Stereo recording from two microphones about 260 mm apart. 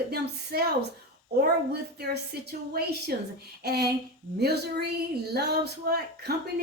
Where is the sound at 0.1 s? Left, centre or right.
Right.